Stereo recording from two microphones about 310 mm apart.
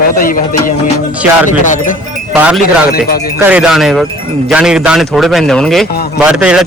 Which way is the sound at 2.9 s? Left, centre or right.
Left.